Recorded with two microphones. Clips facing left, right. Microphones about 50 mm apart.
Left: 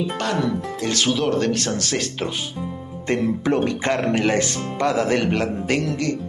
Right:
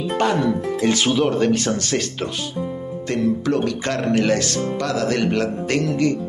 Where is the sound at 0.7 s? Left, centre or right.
Centre.